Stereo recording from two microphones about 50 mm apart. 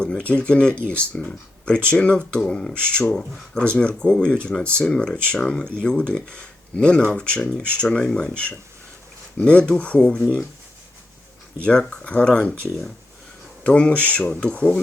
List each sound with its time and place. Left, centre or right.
0.0 s speech: left
9.4 s speech: left
11.6 s speech: left
13.7 s speech: left